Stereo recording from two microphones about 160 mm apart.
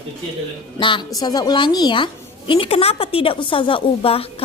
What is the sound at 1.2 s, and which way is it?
A woman's voice, 25° left (ahead or behind).